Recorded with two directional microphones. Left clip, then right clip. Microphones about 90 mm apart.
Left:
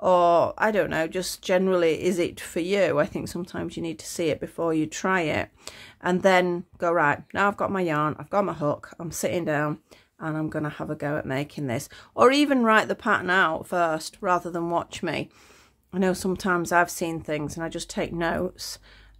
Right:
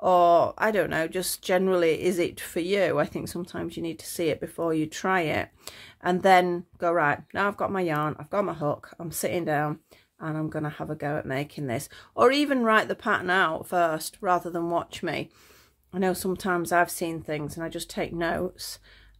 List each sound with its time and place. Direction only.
0.0 s speech: 20° left (ahead or behind)